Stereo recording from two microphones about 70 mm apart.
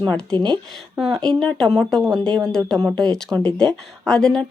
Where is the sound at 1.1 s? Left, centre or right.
Centre.